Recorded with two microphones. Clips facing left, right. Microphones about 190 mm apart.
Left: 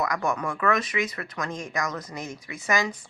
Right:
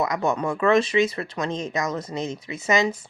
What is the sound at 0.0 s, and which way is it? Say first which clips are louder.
Speech: right 4 dB; 25° right (ahead or behind).